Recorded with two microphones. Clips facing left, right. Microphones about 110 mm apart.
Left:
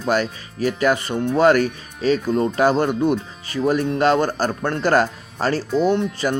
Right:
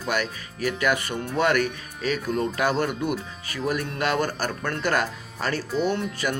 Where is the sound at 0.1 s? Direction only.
30° left (ahead or behind).